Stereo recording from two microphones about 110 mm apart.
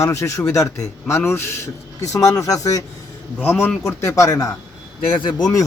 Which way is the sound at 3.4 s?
20° left (ahead or behind).